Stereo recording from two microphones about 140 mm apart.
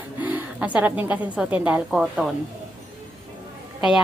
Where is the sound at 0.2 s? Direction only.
10° right (ahead or behind).